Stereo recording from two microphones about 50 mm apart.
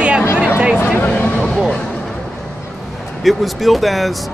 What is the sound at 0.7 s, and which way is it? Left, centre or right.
Vehicle, left.